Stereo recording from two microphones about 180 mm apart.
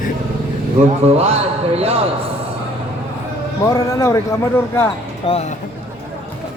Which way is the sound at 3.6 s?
20° left (ahead or behind).